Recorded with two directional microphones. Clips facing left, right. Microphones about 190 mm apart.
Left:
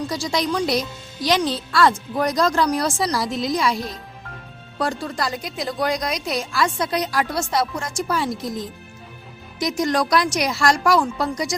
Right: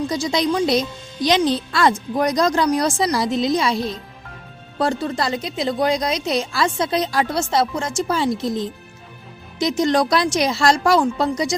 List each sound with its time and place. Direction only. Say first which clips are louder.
0.1 s speech: right 3 dB; 20° right (ahead or behind)
4.8 s speech: right 3 dB; 30° right (ahead or behind)